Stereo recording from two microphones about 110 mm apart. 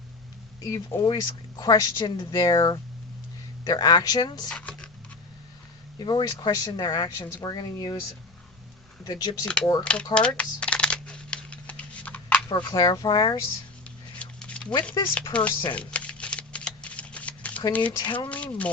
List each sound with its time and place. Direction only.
0.9 s speech: 40° left (ahead or behind)
4.4 s speech: 5° left (ahead or behind)
6.0 s speech: 40° left (ahead or behind)
9.0 s speech: 35° left (ahead or behind)
9.8 s speech: 10° left (ahead or behind)
10.2 s computer keyboard: 10° left (ahead or behind)
12.5 s speech: 40° left (ahead or behind)
14.2 s a sound: 10° left (ahead or behind)
15.0 s speech: 30° left (ahead or behind)
15.3 s speech: 15° left (ahead or behind)
15.7 s shuffling cards: 10° left (ahead or behind)
17.7 s speech: 15° left (ahead or behind)
18.0 s speech: 45° left (ahead or behind)
18.3 s speech: 10° left (ahead or behind)